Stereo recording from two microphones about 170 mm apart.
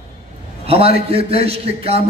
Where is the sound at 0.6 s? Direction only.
35° right (ahead or behind).